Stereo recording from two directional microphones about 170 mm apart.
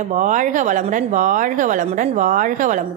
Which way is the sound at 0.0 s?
45° right (ahead or behind).